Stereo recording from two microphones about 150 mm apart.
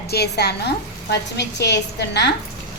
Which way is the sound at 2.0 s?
90° left.